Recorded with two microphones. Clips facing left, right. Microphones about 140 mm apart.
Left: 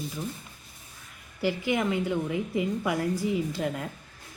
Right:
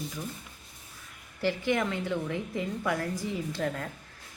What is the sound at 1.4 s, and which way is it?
Speech, 10° left (ahead or behind).